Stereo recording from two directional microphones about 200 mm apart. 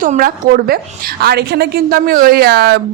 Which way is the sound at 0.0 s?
45° right (ahead or behind).